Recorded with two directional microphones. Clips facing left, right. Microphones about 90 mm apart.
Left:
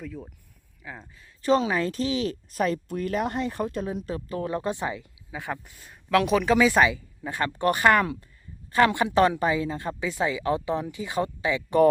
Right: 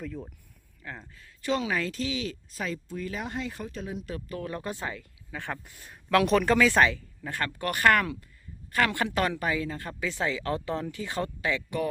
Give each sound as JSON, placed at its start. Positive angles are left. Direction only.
{"t": 0.0, "sound": "speech", "side_deg": 0}
{"t": 1.4, "sound": "speech", "side_deg": 35}
{"t": 1.9, "sound": "speech", "side_deg": 40}
{"t": 3.8, "sound": "speech", "side_deg": 35}
{"t": 5.4, "sound": "speech", "side_deg": 5}